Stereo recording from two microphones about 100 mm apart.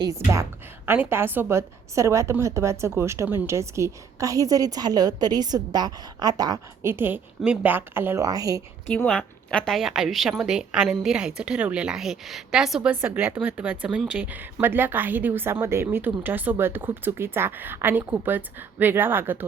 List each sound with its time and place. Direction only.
0.2 s a woman's voice: 25° right (ahead or behind); by 6.6 s 40° right (ahead or behind)
6.8 s a woman's voice: 20° right (ahead or behind)
8.2 s a woman's voice: 40° right (ahead or behind)
8.9 s a woman's voice: 5° left (ahead or behind)
9.7 s a woman's voice: 5° right (ahead or behind)
12.9 s a woman's voice: 20° right (ahead or behind)